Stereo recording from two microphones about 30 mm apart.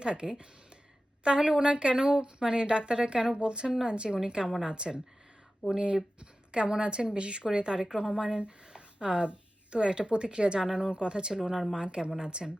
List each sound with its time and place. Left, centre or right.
0.0 s a woman's voice: right
8.4 s a sound: right
9.7 s speech: right